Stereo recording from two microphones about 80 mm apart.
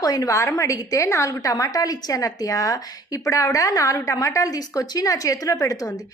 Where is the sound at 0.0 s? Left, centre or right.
Left.